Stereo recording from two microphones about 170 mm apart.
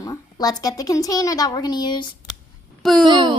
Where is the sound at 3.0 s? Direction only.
30° right (ahead or behind).